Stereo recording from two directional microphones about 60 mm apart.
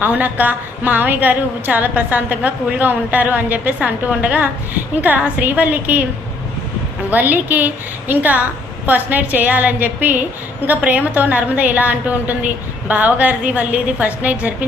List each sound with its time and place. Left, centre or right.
0.0 s a woman's voice: right
7.1 s a woman's voice: right